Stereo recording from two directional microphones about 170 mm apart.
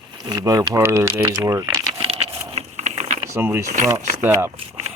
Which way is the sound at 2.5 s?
45° right (ahead or behind).